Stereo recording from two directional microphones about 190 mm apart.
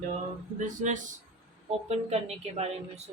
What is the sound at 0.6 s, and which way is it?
Speech, 40° right (ahead or behind).